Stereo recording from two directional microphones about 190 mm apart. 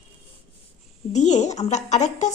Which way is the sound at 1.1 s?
40° left (ahead or behind).